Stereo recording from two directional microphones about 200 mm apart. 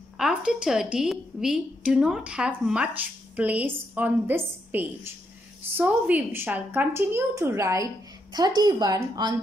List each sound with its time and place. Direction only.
0.2 s a woman's voice: 5° right (ahead or behind); by 9.3 s 20° right (ahead or behind)